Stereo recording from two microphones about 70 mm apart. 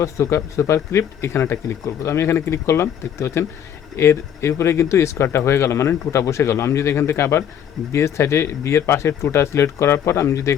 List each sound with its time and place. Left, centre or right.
0.0 s speech: left